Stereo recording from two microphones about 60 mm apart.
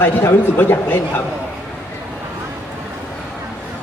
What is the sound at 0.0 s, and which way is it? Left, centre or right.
Speech, left.